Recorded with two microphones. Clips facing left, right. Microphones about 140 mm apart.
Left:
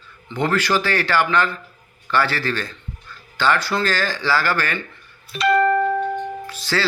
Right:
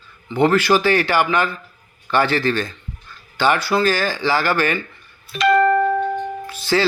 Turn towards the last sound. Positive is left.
turn(degrees=-15)  # may be behind; listen again after turning